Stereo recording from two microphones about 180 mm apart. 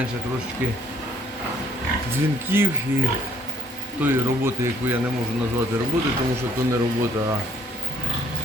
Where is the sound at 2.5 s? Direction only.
10° right (ahead or behind).